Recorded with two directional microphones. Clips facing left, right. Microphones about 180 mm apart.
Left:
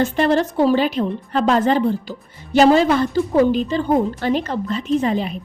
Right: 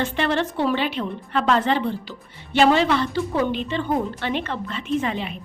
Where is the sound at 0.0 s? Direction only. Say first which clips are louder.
Left 6 dB; 40° left (ahead or behind).